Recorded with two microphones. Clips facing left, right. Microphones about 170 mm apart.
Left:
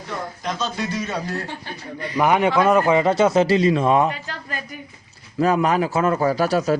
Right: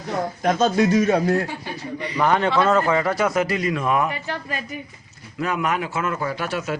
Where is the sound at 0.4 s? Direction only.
50° right (ahead or behind).